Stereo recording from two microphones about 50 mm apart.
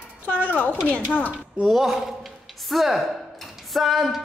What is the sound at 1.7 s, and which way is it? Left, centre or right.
Speech, centre.